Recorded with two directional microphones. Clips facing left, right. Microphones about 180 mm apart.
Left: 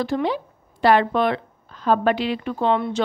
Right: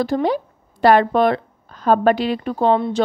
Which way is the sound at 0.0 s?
40° right (ahead or behind).